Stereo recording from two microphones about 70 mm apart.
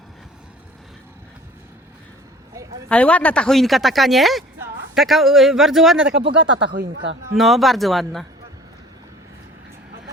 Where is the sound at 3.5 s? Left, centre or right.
Centre.